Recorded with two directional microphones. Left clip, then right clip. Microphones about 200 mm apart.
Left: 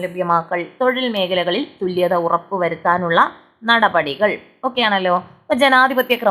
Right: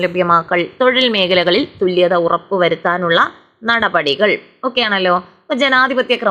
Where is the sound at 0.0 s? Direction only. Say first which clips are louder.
Right 5 dB; 15° right (ahead or behind).